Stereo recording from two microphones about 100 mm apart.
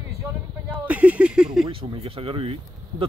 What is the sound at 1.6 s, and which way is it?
Speech, 65° right (ahead or behind).